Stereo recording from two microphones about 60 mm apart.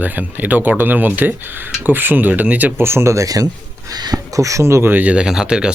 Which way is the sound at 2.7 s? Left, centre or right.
Right.